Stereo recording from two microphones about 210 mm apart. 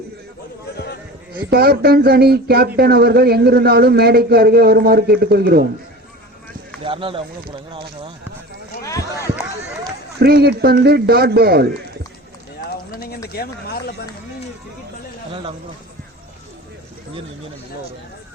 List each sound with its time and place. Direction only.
1.3 s speech: 45° right (ahead or behind)
6.8 s speech: 25° right (ahead or behind)
8.8 s a sound: 15° left (ahead or behind)
10.2 s speech: 50° right (ahead or behind)
12.9 s a sound: 50° left (ahead or behind)
13.3 s speech: 45° left (ahead or behind)